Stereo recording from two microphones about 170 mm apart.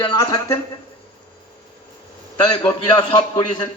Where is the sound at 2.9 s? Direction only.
25° left (ahead or behind).